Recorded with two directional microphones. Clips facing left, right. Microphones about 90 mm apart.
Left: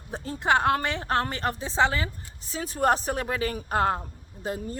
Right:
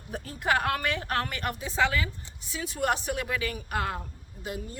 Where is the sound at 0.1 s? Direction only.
25° left (ahead or behind).